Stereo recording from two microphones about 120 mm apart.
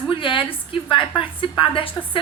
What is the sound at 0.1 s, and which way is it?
A woman's voice, 45° left (ahead or behind).